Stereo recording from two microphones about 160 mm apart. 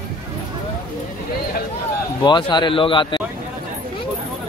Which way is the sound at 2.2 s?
30° left (ahead or behind).